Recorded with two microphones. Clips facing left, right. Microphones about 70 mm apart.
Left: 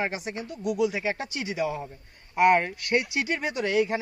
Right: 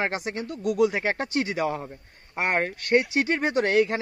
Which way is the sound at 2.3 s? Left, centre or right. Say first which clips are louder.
Left 5 dB; right.